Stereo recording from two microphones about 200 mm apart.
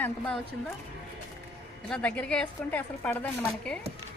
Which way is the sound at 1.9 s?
5° left (ahead or behind).